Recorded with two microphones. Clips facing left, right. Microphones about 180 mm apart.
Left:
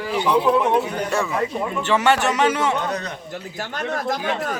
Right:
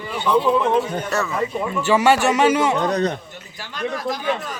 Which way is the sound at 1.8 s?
10° right (ahead or behind).